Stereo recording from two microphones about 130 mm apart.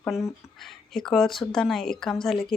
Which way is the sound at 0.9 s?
Centre (ahead or behind).